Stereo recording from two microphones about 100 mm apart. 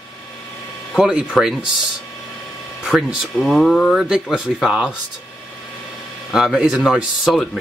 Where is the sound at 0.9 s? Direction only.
5° right (ahead or behind).